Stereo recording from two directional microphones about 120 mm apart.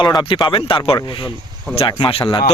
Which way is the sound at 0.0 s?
35° left (ahead or behind).